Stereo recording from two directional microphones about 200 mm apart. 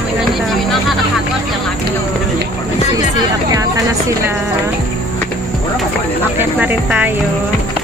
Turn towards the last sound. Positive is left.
turn(degrees=-10)  # may be behind; listen again after turning